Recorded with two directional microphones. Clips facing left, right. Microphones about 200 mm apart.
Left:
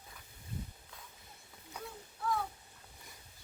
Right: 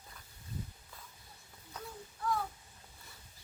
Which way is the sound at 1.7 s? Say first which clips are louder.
Even; centre (ahead or behind).